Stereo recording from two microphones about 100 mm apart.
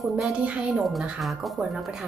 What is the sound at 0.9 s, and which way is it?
Speech, centre (ahead or behind).